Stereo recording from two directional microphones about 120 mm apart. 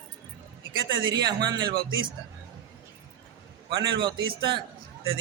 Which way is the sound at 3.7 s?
35° right (ahead or behind).